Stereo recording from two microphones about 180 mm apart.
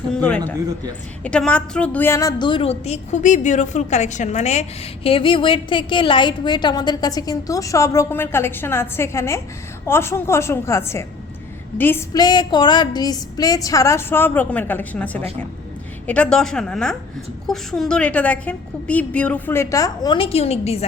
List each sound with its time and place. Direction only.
0.1 s a woman's voice: 10° left (ahead or behind)
12.1 s a woman's voice: 25° left (ahead or behind)